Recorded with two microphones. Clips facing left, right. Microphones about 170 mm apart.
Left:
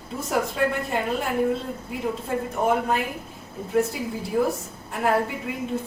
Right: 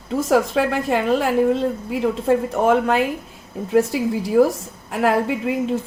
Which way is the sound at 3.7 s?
90° right.